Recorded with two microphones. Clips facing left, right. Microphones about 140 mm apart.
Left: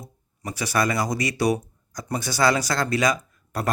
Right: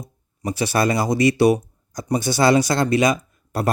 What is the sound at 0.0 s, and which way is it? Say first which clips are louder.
Speech: right 7 dB; 25° right (ahead or behind).